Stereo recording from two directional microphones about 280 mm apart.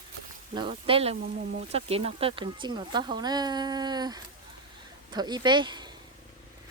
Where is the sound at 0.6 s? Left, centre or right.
Centre.